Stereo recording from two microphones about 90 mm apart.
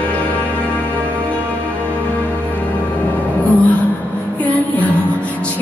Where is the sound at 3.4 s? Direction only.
15° left (ahead or behind).